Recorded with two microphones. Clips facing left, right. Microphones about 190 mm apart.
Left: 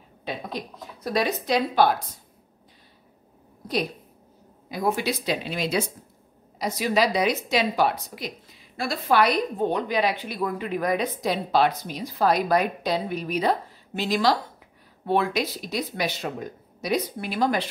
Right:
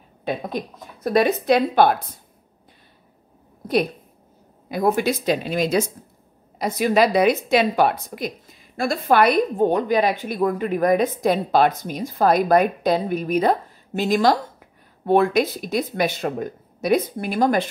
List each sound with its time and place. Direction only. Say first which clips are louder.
0.2 s a woman's voice: right 6 dB; 50° right (ahead or behind)
4.8 s a woman's voice: right 5 dB; 50° right (ahead or behind)